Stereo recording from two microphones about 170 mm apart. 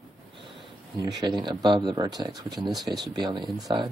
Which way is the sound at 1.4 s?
25° right (ahead or behind).